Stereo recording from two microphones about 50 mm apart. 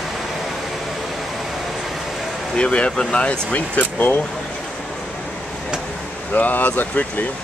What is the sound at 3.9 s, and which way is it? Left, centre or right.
Speech, left.